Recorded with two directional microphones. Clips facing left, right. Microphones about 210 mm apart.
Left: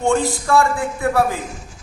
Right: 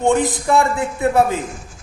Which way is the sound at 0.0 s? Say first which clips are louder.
Right 2 dB; 20° right (ahead or behind).